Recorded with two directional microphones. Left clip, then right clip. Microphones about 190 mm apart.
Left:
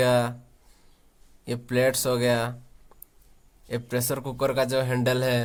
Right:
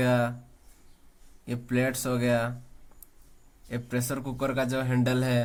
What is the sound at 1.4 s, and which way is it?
Speech, 50° left (ahead or behind).